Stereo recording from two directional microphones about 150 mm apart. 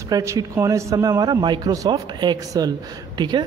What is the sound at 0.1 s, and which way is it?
A man's voice, 20° right (ahead or behind).